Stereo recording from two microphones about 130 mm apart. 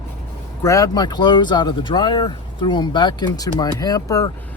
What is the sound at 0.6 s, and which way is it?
Speech, 25° left (ahead or behind).